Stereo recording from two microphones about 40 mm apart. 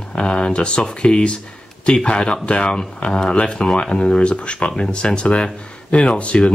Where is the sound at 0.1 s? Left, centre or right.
Left.